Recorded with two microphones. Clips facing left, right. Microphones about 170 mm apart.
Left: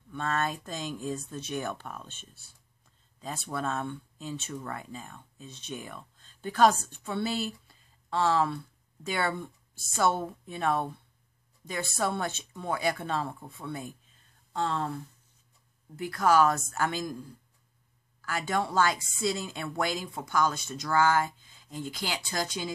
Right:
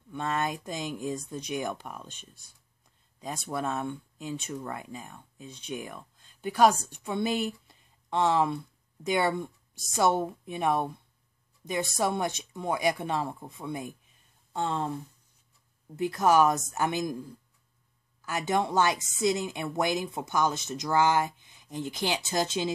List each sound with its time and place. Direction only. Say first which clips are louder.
0.1 s a woman's voice: right 1 dB; 15° right (ahead or behind)
16.0 s a woman's voice: right 1 dB; 20° right (ahead or behind)
18.2 s a woman's voice: right 2 dB; 20° right (ahead or behind)